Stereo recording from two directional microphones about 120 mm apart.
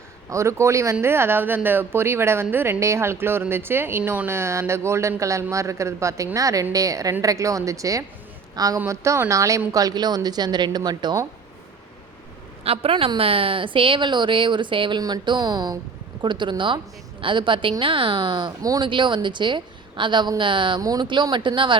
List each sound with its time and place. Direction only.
0.3 s a woman's voice: 25° right (ahead or behind)
12.6 s a woman's voice: 55° right (ahead or behind)